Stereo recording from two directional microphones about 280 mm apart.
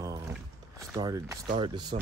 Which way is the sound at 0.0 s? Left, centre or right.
Centre.